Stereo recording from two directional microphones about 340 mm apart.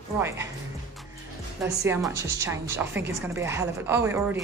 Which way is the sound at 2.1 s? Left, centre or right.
Right.